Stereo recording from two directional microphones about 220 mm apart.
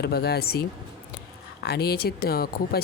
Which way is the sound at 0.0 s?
45° left (ahead or behind).